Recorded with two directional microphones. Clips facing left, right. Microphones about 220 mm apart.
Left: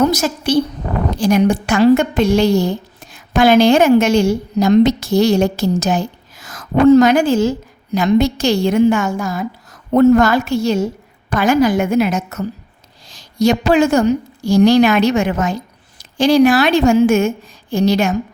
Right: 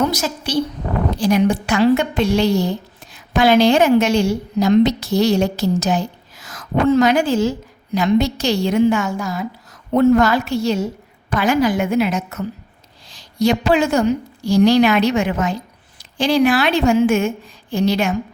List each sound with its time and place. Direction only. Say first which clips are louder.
0.1 s a woman's voice: left 5 dB; 50° left (ahead or behind)